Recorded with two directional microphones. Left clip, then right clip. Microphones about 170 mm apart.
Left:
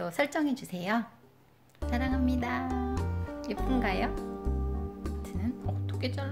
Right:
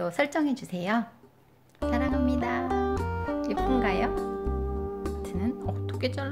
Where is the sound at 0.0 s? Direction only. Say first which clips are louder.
Right 3 dB; 10° right (ahead or behind).